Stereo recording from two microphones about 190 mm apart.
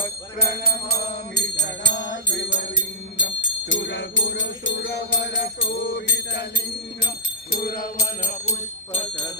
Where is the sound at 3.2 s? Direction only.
75° left (ahead or behind).